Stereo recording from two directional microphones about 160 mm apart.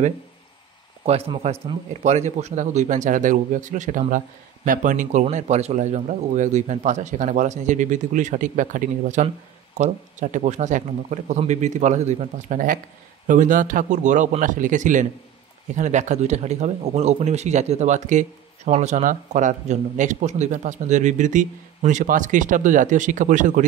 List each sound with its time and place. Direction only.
1.0 s speech: 40° right (ahead or behind)